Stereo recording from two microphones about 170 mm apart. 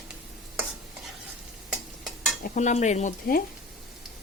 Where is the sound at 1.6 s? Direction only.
Centre (ahead or behind).